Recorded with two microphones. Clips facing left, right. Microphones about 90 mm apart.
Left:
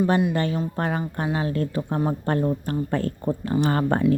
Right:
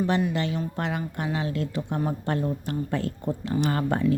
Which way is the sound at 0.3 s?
45° left (ahead or behind).